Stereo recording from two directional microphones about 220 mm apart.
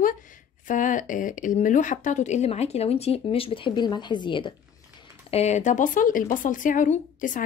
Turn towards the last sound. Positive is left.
turn(degrees=35)  # may be behind; listen again after turning